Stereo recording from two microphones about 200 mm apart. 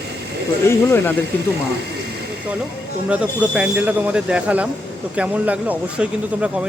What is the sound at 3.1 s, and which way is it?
Speech, 5° right (ahead or behind).